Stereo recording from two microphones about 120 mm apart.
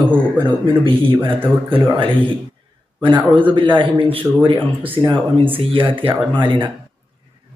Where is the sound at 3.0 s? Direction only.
45° right (ahead or behind).